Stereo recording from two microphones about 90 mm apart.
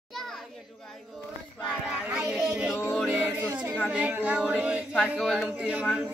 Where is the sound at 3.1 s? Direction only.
25° right (ahead or behind).